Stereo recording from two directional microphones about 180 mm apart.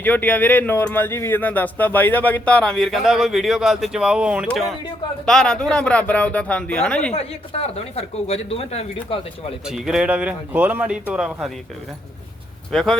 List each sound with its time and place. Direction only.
0.0 s speech: 10° left (ahead or behind)
7.1 s speech: 35° left (ahead or behind)
9.6 s speech: 5° right (ahead or behind)
12.7 s speech: centre (ahead or behind)